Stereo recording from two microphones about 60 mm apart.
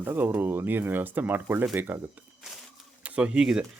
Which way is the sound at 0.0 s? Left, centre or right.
Right.